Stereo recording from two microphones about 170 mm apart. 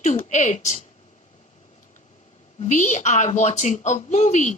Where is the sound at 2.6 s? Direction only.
45° left (ahead or behind).